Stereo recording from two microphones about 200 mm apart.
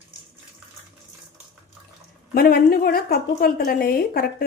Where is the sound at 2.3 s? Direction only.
50° left (ahead or behind).